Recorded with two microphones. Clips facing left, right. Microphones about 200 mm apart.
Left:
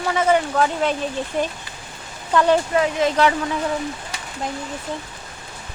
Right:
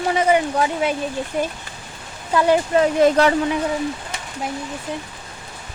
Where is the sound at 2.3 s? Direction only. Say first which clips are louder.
Even; 10° right (ahead or behind).